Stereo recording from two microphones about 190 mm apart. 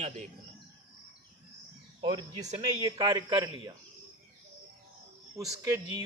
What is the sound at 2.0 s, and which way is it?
Speech, 25° right (ahead or behind).